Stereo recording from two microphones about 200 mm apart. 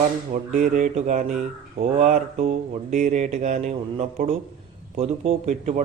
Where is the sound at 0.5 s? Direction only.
40° right (ahead or behind).